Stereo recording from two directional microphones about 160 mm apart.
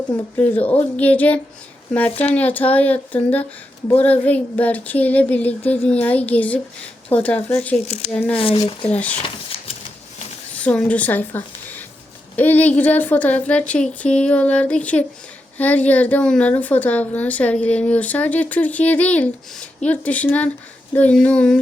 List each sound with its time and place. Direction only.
0.3 s a woman's voice: 10° left (ahead or behind)
8.4 s speech: 40° left (ahead or behind)
8.9 s a woman's voice: 10° left (ahead or behind)
9.2 s shuffling cards: 35° left (ahead or behind)
10.6 s a woman's voice: 10° left (ahead or behind)